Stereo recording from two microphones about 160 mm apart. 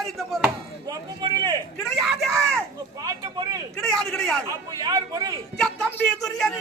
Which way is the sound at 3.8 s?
5° left (ahead or behind).